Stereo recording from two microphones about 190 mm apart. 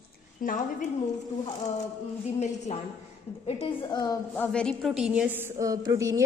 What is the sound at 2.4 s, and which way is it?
A woman's voice, 35° left (ahead or behind).